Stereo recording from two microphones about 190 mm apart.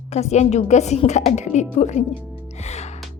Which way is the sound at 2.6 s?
35° left (ahead or behind).